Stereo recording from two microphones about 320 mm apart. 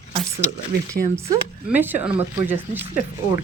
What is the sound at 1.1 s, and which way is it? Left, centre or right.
Speech, centre.